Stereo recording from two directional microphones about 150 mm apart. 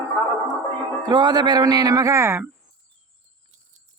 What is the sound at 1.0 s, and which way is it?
Speech, 30° right (ahead or behind).